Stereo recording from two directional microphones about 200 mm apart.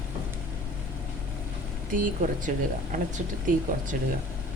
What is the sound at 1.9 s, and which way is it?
Speech, 40° right (ahead or behind).